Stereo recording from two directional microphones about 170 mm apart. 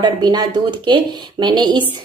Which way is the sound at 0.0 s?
25° right (ahead or behind).